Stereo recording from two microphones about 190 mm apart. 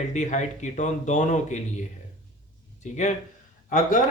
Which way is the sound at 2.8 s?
35° left (ahead or behind).